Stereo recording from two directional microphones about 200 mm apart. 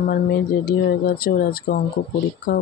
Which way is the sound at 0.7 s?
50° left (ahead or behind).